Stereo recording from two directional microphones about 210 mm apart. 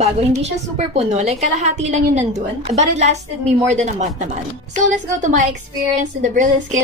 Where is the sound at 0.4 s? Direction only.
30° right (ahead or behind).